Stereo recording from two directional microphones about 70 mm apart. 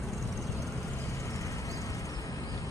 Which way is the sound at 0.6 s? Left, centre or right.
Left.